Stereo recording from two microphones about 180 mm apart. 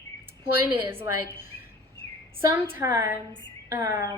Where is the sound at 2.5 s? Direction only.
15° right (ahead or behind).